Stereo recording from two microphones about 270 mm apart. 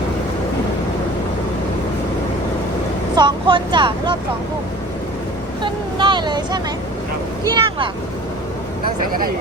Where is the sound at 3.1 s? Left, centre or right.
Centre.